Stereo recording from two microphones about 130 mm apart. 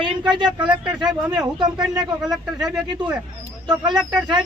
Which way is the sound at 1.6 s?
35° right (ahead or behind).